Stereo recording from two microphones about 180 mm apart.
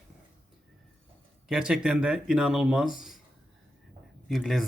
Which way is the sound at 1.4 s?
5° right (ahead or behind).